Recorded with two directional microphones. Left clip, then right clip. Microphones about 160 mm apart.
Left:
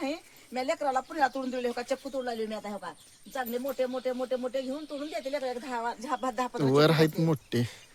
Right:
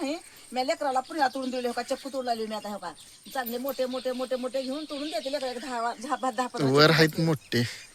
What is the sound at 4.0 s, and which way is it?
Speech, 20° left (ahead or behind).